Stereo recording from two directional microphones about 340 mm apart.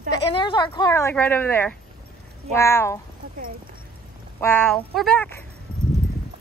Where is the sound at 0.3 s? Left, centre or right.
Centre.